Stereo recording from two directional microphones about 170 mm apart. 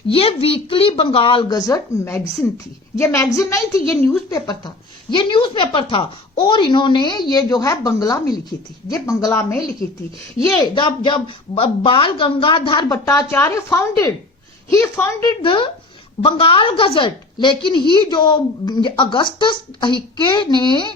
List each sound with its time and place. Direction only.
0.1 s a woman's voice: 35° left (ahead or behind)